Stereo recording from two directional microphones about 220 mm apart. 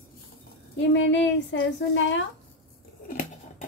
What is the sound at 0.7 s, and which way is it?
A woman's voice, 55° left (ahead or behind).